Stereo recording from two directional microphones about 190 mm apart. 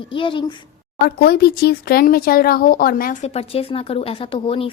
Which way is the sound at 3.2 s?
30° left (ahead or behind).